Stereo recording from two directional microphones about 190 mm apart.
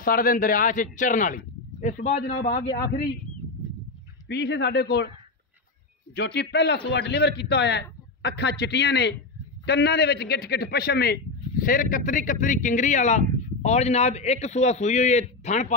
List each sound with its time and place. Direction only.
0.0 s speech: 50° left (ahead or behind)
4.3 s a man's voice: 65° left (ahead or behind)
6.1 s a man's voice: 60° left (ahead or behind); by 15.7 s 40° left (ahead or behind)